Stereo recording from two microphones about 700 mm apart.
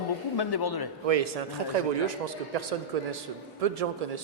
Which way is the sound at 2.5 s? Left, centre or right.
Right.